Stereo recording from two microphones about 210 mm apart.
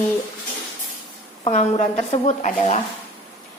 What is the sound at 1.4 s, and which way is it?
A woman's voice, 30° left (ahead or behind).